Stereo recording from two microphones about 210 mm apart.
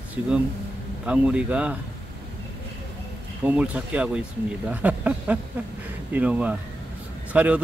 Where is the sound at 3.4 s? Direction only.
10° right (ahead or behind).